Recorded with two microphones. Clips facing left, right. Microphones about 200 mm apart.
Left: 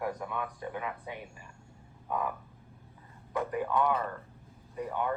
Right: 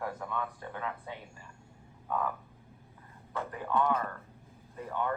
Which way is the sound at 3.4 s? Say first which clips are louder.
Left 2 dB; 15° left (ahead or behind).